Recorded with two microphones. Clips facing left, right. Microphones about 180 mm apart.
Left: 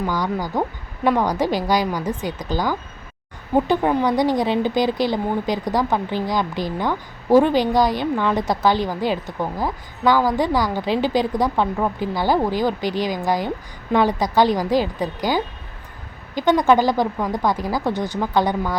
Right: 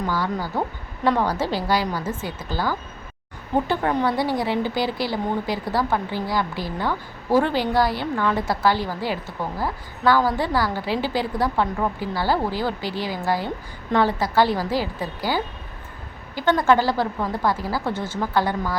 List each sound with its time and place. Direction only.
0.1 s a woman's voice: 15° left (ahead or behind)